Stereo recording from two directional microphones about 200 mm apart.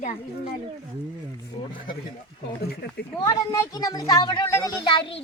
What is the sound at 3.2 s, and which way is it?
A woman's voice, 15° left (ahead or behind).